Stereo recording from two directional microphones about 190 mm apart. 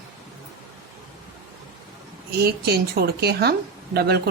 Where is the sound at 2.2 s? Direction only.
55° right (ahead or behind).